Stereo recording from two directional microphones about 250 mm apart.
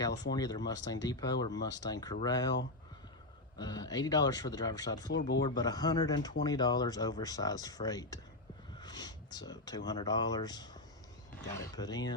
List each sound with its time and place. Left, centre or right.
0.0 s speech: centre
3.6 s speech: centre